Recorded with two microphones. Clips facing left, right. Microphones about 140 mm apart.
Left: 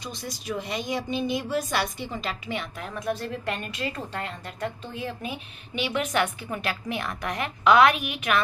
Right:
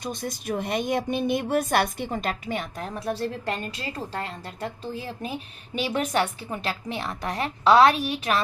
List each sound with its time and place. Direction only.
0.0 s a woman's voice: 50° right (ahead or behind); by 8.4 s 35° right (ahead or behind)